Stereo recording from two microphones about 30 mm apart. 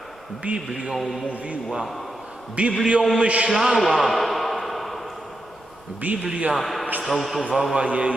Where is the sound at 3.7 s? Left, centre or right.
Centre.